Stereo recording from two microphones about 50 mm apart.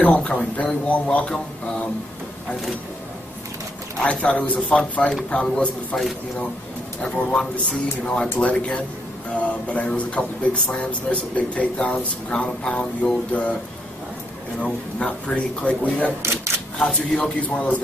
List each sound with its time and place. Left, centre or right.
0.1 s speech: centre
4.0 s speech: left
7.0 s speech: left
13.3 s speech: left
14.6 s speech: left
16.2 s speech: right
16.8 s speech: centre
17.5 s speech: left